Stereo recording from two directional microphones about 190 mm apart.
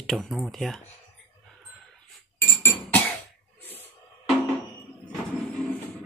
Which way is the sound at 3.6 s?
10° left (ahead or behind).